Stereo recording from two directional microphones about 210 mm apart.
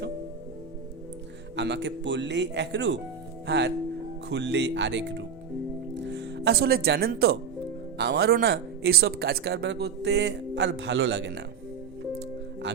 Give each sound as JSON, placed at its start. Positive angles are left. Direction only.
{"t": 1.5, "sound": "speech", "side_deg": -55}